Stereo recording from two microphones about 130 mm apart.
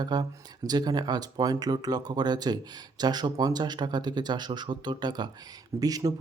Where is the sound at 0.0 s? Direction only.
30° right (ahead or behind).